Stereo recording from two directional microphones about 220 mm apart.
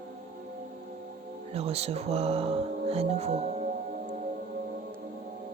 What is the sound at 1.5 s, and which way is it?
Speech, 30° right (ahead or behind).